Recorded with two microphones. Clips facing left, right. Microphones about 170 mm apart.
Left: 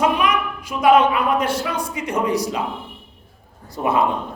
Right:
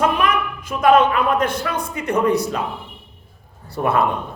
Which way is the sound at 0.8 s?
10° left (ahead or behind).